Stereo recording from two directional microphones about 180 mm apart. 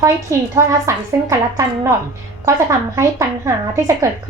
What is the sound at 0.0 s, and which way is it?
A woman's voice, 15° right (ahead or behind).